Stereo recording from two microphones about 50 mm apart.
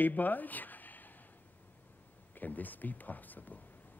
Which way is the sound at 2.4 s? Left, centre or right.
Left.